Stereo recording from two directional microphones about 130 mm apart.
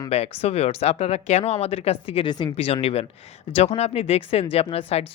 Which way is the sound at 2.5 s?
50° left (ahead or behind).